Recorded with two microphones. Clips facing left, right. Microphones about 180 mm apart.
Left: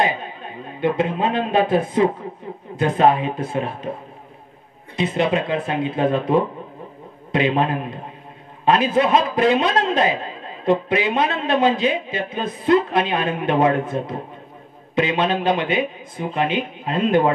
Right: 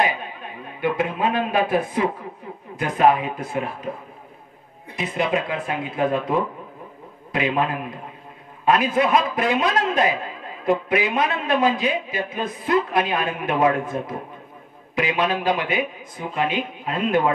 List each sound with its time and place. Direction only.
0.0 s a man's voice: 25° left (ahead or behind)
4.9 s a man's voice: 25° left (ahead or behind)